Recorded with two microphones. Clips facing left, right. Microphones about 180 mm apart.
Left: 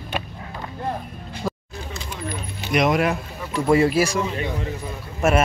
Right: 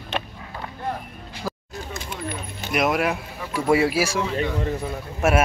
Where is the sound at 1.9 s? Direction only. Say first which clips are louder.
Even; 45° right (ahead or behind).